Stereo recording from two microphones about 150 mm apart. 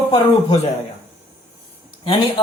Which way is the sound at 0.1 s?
45° left (ahead or behind).